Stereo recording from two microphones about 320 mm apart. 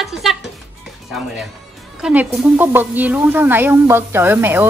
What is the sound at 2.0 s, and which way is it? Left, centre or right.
A woman's voice, centre.